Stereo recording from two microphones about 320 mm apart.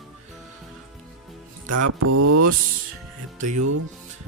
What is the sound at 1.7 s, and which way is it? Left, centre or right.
Mantra, right.